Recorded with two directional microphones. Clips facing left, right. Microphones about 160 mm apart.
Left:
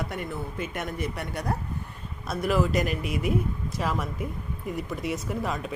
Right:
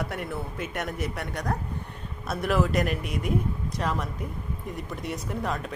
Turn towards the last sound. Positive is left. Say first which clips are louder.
# even
turn(degrees=5)  # may be behind; listen again after turning